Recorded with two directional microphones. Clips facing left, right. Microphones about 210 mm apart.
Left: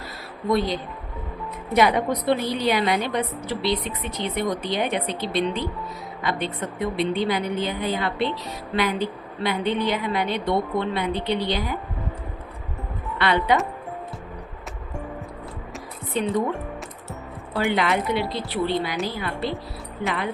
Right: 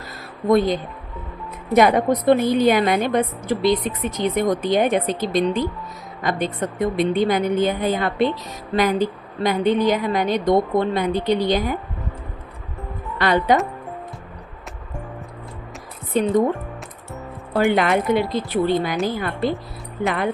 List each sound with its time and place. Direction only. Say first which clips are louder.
0.4 s a woman's voice: right 6 dB; 50° right (ahead or behind)
13.1 s a woman's voice: right 3 dB; 45° right (ahead or behind)
16.1 s a woman's voice: right 5 dB; 45° right (ahead or behind)
17.5 s a woman's voice: right 5 dB; 50° right (ahead or behind)